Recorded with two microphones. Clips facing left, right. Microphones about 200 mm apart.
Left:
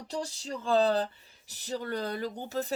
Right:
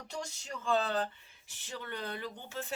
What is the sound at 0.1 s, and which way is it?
Speech, 35° left (ahead or behind).